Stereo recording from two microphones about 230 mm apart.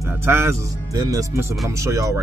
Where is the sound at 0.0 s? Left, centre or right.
Centre.